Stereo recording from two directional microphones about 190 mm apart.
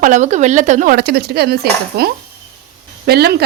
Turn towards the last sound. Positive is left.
turn(degrees=-55)  # may be behind; listen again after turning